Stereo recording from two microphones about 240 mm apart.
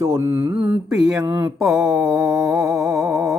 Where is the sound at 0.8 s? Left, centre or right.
Centre.